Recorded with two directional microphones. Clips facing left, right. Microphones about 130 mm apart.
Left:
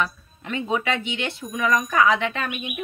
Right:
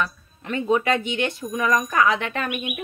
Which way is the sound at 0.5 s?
45° right (ahead or behind).